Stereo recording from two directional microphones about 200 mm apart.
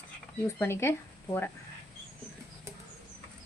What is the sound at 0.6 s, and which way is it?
Speech, 10° left (ahead or behind).